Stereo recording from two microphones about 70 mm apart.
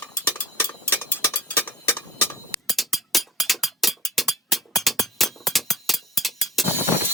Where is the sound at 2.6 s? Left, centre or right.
Centre.